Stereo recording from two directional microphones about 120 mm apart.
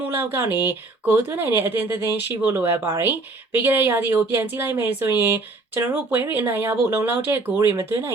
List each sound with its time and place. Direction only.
0.0 s speech: 15° right (ahead or behind)